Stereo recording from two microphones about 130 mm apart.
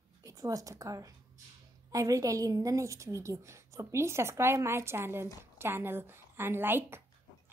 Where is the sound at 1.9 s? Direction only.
25° right (ahead or behind).